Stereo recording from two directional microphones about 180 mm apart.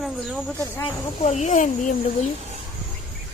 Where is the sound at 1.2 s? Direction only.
40° left (ahead or behind).